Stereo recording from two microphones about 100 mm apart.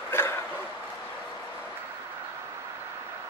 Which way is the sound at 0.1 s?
25° left (ahead or behind).